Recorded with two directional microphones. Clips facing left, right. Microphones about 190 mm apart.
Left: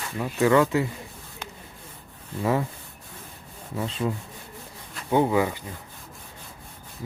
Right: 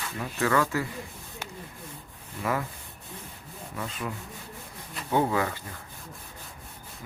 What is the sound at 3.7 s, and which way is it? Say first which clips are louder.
Speech: left 7 dB; 25° left (ahead or behind).